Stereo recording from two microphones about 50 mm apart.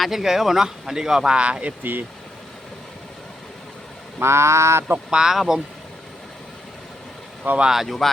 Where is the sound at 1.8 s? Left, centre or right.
Right.